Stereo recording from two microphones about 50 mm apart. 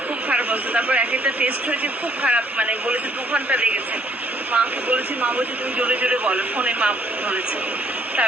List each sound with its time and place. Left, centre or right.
0.3 s speech: right